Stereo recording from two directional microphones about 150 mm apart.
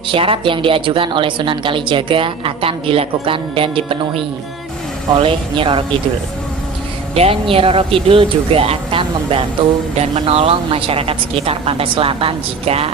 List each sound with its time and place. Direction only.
0.1 s a woman's voice: 35° right (ahead or behind)
5.2 s a woman's voice: 35° right (ahead or behind)
7.1 s a woman's voice: 40° right (ahead or behind)